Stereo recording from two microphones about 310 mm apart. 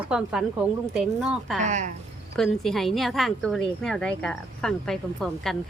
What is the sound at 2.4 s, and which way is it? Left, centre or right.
Speech, centre.